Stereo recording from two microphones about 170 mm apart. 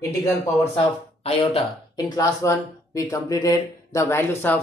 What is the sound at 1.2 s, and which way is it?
Speech, 35° left (ahead or behind).